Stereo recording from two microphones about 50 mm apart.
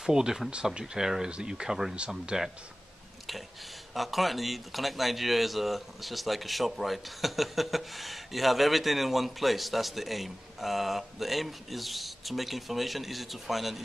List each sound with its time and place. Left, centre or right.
0.0 s speech: centre
2.0 s speech: right
3.9 s speech: centre